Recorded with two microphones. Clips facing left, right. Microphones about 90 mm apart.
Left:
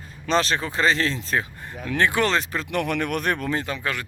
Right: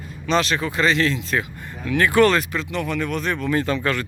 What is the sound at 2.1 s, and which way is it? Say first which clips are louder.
Speech: right 8 dB; 20° left (ahead or behind).